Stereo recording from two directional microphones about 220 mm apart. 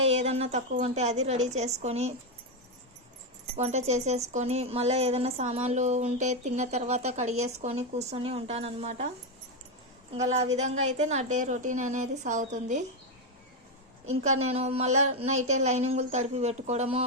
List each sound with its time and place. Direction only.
0.0 s speech: 30° right (ahead or behind)
3.6 s speech: 30° right (ahead or behind)
10.2 s speech: 30° right (ahead or behind)
14.3 s speech: 30° right (ahead or behind)